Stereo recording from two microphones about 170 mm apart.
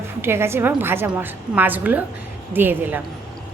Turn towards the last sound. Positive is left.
turn(degrees=-10)  # may be behind; listen again after turning